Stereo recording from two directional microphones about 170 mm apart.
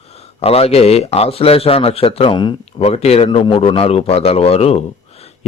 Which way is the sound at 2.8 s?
40° left (ahead or behind).